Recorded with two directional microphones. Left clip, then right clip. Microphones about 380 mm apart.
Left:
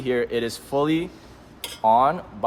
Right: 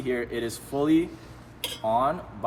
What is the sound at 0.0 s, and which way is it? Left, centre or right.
Speech, centre.